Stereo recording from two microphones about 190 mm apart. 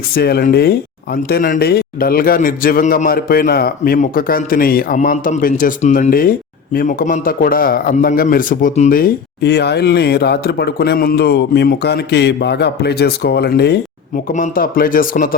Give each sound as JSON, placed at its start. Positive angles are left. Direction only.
{"t": 0.2, "sound": "a man's voice", "side_deg": 55}
{"t": 14.3, "sound": "speech", "side_deg": 50}